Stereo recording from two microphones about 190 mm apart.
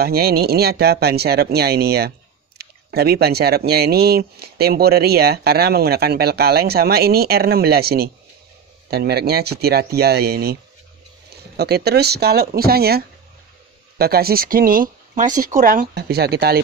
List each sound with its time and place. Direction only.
0.0 s speech: 55° right (ahead or behind)